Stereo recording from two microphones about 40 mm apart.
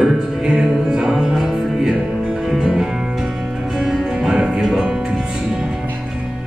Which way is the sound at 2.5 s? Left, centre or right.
Centre.